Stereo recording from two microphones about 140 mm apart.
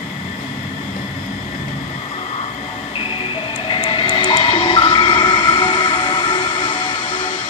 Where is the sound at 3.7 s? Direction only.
40° left (ahead or behind).